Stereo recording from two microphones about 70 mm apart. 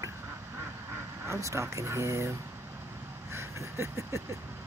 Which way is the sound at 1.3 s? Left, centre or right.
Right.